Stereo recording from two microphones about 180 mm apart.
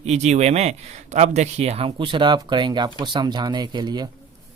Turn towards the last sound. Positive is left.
turn(degrees=-25)  # may be behind; listen again after turning